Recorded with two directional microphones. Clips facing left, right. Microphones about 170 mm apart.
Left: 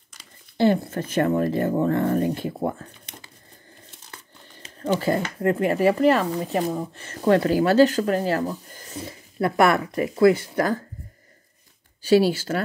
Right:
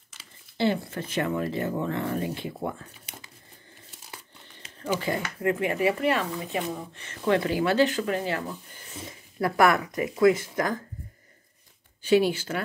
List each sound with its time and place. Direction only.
0.6 s speech: 45° left (ahead or behind)
5.1 s speech: 40° left (ahead or behind)
9.4 s speech: 25° left (ahead or behind)
12.0 s speech: 40° left (ahead or behind)